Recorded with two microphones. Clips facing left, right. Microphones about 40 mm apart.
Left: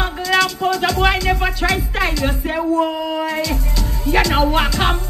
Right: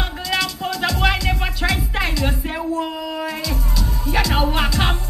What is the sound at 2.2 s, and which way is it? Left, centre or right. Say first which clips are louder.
Speech: left 4 dB; centre.